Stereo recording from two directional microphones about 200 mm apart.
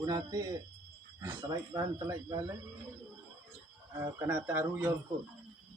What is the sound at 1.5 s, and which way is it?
Speech, 20° right (ahead or behind).